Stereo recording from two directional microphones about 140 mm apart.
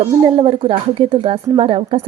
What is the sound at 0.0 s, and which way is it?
A woman's voice, 40° right (ahead or behind).